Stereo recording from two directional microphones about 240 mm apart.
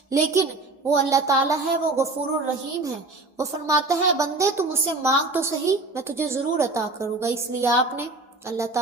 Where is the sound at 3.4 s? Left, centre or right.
Centre.